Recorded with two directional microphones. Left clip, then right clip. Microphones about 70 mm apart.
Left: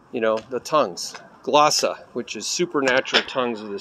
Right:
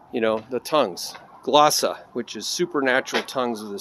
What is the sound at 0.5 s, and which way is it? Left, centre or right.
Speech, right.